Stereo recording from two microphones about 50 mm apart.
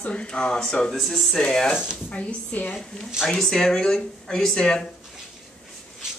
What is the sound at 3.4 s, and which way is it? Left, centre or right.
Speech, centre.